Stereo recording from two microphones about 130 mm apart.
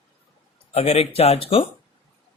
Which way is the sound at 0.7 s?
55° left (ahead or behind).